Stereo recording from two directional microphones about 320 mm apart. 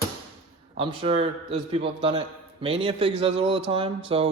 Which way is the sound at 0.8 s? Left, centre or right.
Centre.